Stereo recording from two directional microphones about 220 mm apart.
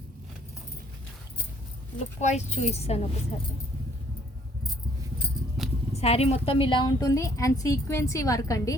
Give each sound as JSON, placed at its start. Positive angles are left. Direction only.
{"t": 2.2, "sound": "a woman's voice", "side_deg": 30}
{"t": 5.9, "sound": "a woman's voice", "side_deg": 30}